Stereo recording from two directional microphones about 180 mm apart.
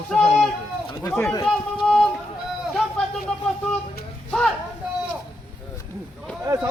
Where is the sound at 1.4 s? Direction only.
Centre (ahead or behind).